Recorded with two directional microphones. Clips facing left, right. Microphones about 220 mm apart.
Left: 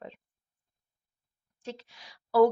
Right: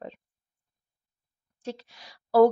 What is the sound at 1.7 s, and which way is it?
Speech, 40° right (ahead or behind).